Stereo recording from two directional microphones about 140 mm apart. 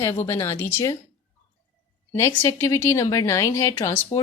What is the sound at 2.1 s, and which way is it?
A woman's voice, 20° left (ahead or behind).